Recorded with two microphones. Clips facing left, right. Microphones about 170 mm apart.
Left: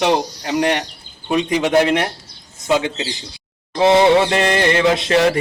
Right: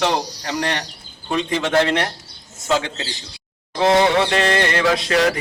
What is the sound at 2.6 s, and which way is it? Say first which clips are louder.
Music: left 3 dB; 20° left (ahead or behind).